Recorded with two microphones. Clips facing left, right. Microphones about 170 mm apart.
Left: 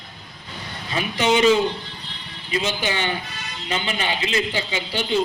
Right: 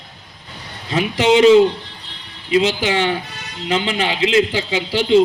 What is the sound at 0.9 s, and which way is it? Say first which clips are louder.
Speech: right 6 dB; 90° right.